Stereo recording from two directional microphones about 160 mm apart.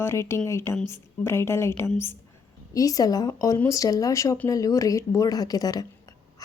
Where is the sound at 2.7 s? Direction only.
20° left (ahead or behind).